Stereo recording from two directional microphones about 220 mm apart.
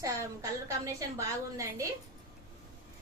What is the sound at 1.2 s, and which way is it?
Speech, 15° right (ahead or behind).